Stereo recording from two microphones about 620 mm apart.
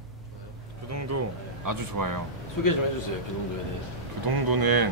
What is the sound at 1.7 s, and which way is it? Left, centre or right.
Speech, right.